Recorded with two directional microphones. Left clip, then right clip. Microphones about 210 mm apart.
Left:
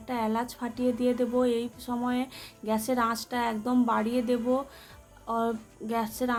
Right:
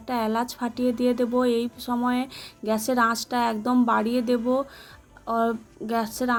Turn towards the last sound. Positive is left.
turn(degrees=-25)  # may be behind; listen again after turning